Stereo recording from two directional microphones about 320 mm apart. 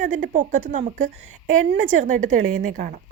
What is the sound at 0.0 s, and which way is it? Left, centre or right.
A woman's voice, right.